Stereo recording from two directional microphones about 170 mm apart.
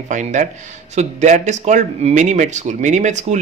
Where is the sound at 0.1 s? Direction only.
45° right (ahead or behind).